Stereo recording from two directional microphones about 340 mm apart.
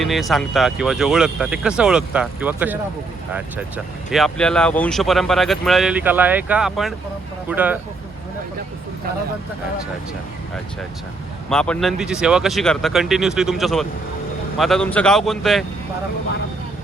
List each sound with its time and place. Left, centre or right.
0.0 s speech: centre
4.1 s speech: centre
11.4 s speech: centre